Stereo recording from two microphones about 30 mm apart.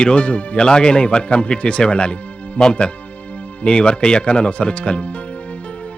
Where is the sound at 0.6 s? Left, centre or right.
Left.